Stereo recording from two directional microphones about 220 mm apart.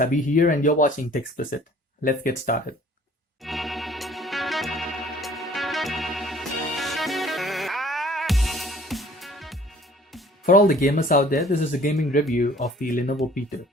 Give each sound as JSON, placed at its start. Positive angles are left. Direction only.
{"t": 0.0, "sound": "speech", "side_deg": 35}
{"t": 3.4, "sound": "music", "side_deg": 0}
{"t": 10.4, "sound": "speech", "side_deg": 40}